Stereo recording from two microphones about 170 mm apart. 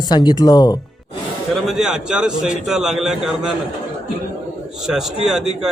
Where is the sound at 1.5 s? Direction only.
Centre (ahead or behind).